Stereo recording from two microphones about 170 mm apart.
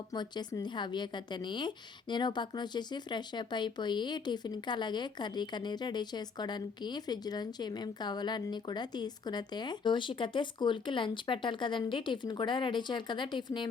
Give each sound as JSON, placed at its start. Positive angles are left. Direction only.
{"t": 0.1, "sound": "speech", "side_deg": 25}